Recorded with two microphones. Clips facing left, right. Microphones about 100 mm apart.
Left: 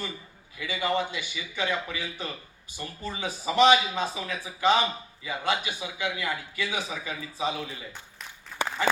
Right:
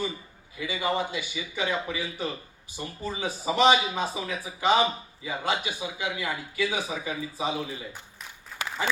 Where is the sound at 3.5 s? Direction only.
15° right (ahead or behind).